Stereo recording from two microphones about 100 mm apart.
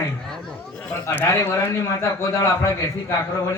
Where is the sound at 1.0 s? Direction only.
25° left (ahead or behind).